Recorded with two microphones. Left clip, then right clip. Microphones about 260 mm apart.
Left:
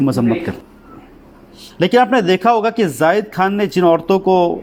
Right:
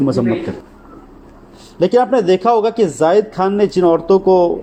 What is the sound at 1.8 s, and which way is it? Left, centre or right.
A man's voice, left.